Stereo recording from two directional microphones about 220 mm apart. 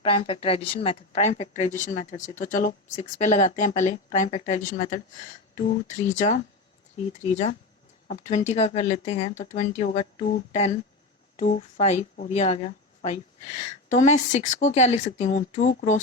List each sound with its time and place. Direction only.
0.0 s speech: 25° left (ahead or behind)